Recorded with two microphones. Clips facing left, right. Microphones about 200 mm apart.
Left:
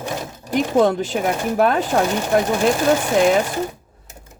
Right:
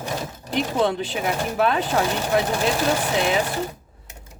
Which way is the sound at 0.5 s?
45° left (ahead or behind).